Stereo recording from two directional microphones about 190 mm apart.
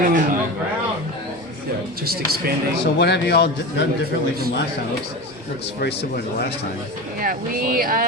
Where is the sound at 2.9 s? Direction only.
60° left (ahead or behind).